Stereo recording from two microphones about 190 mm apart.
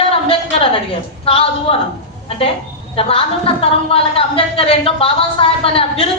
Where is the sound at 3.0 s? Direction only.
30° left (ahead or behind).